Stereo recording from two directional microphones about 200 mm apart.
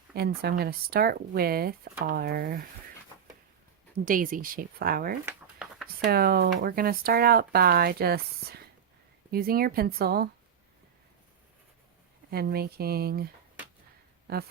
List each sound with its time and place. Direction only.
0.1 s speech: 50° right (ahead or behind)
3.9 s speech: 45° right (ahead or behind)
5.2 s a sound: 5° right (ahead or behind)
6.0 s speech: 50° right (ahead or behind)
12.3 s speech: 50° right (ahead or behind)